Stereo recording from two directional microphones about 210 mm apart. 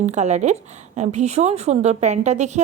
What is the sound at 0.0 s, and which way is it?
Speech, 35° right (ahead or behind).